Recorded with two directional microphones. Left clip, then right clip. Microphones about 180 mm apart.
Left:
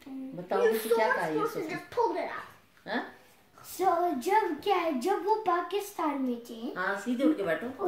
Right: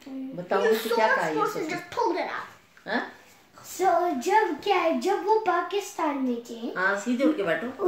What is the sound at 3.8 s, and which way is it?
Child singing, 10° left (ahead or behind).